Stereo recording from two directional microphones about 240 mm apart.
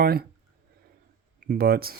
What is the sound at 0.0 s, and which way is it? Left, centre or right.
Speech, right.